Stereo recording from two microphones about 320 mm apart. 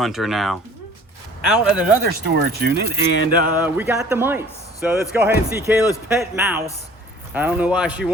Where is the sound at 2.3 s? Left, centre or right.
Right.